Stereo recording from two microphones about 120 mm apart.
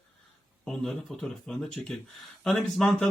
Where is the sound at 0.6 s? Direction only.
5° left (ahead or behind).